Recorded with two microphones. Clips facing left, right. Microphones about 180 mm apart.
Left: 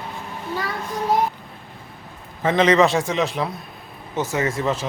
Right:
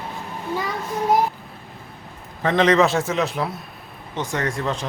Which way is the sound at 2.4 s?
Centre (ahead or behind).